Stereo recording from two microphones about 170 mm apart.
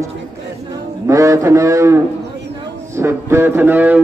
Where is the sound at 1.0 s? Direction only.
15° right (ahead or behind).